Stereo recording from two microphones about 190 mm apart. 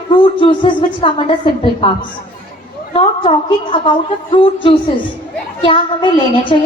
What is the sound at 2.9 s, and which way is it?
A woman's voice, 30° left (ahead or behind).